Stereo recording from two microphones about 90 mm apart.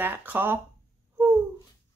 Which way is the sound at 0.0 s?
20° right (ahead or behind).